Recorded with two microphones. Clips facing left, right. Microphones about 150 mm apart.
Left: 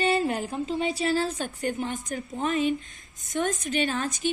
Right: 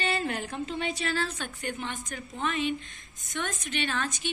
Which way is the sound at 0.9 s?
40° left (ahead or behind).